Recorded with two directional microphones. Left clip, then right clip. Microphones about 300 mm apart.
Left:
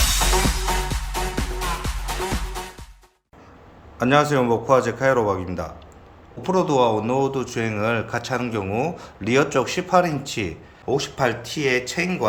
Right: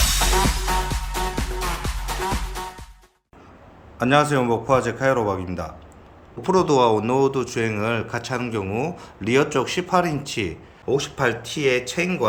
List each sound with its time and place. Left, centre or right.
0.0 s music: centre
3.9 s speech: centre